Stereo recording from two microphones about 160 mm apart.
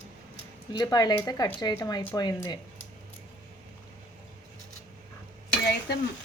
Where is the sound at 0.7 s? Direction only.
25° left (ahead or behind).